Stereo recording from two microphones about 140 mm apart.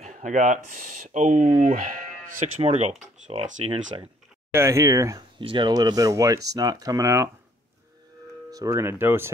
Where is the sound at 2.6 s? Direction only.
50° right (ahead or behind).